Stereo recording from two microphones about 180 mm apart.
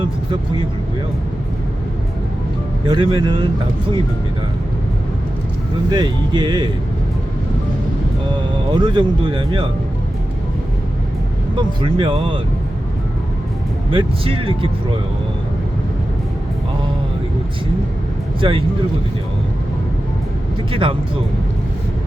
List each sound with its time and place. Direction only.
0.0 s speech: 30° right (ahead or behind)
2.8 s speech: 25° right (ahead or behind)
5.9 s speech: 25° right (ahead or behind)
8.7 s speech: 25° right (ahead or behind)
11.5 s speech: 25° right (ahead or behind)
13.9 s speech: 30° right (ahead or behind)
18.3 s speech: 30° right (ahead or behind)